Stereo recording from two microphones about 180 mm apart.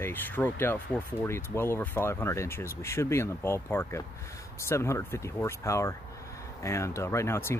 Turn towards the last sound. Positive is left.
turn(degrees=15)  # may be behind; listen again after turning